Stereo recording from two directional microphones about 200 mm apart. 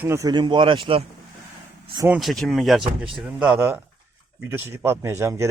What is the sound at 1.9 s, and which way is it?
Speech, 15° right (ahead or behind).